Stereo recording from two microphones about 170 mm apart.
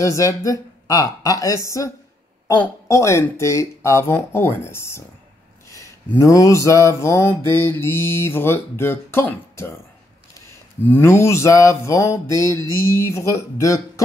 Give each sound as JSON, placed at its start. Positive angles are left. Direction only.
{"t": 0.0, "sound": "speech", "side_deg": 20}
{"t": 2.4, "sound": "mantra", "side_deg": 15}